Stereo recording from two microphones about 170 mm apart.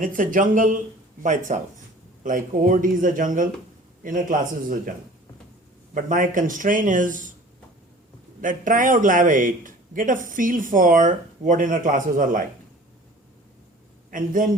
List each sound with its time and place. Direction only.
0.0 s a man's voice: 50° right (ahead or behind)
5.9 s a man's voice: 50° right (ahead or behind)
8.4 s a man's voice: 50° right (ahead or behind)
14.1 s a man's voice: 50° right (ahead or behind)